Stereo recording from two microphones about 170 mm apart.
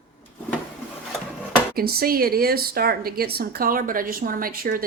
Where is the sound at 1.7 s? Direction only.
60° right (ahead or behind).